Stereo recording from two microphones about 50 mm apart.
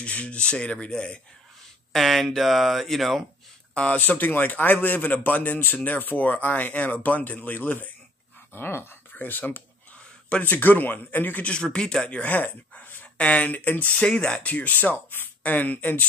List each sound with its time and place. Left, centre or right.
0.0 s speech: left
1.9 s speech: centre
3.7 s speech: left
4.0 s speech: left
11.4 s speech: centre
12.2 s a sound: left
13.2 s speech: left
14.0 s speech: left